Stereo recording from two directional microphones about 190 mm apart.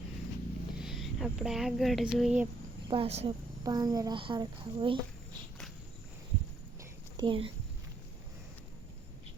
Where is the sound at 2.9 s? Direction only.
30° right (ahead or behind).